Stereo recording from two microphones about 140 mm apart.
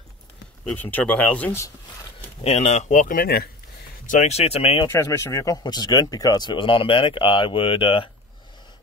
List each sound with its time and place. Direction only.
0.7 s speech: 10° left (ahead or behind)
2.4 s speech: 50° left (ahead or behind); by 3.4 s 85° left
4.0 s speech: 65° left (ahead or behind); by 4.8 s 45° left (ahead or behind)
4.8 s speech: 20° left (ahead or behind); by 8.1 s 40° left (ahead or behind)